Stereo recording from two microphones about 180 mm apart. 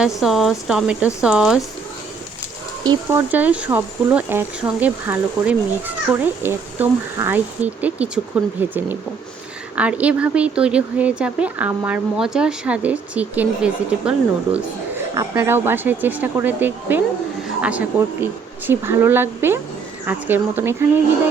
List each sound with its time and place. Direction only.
0.0 s speech: centre (ahead or behind)
3.1 s speech: 10° right (ahead or behind)
9.7 s speech: 5° right (ahead or behind)
15.1 s speech: 20° right (ahead or behind)